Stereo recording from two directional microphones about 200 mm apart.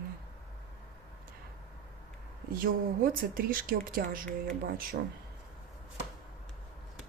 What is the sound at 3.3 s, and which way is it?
Speech, 45° right (ahead or behind).